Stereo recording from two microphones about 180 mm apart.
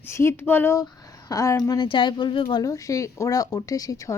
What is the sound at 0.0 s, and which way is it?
Speech, 15° left (ahead or behind).